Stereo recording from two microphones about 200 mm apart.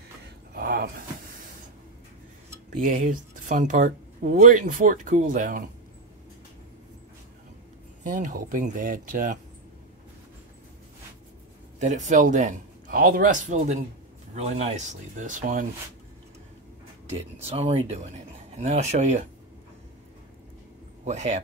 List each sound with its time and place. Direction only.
0.6 s a sound: 50° right (ahead or behind)
2.7 s speech: 40° right (ahead or behind)
8.0 s speech: 40° right (ahead or behind)
11.8 s speech: 35° right (ahead or behind)
17.1 s speech: 30° right (ahead or behind)
21.0 s a man's voice: 35° right (ahead or behind)